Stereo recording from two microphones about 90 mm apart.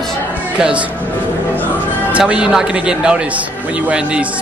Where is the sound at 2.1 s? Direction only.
15° right (ahead or behind).